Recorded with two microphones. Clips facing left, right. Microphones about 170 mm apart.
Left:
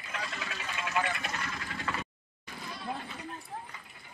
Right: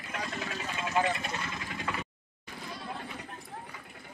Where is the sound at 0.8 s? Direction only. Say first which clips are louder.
Right 3 dB; 25° right (ahead or behind).